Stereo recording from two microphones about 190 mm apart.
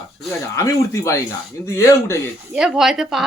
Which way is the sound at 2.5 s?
5° right (ahead or behind).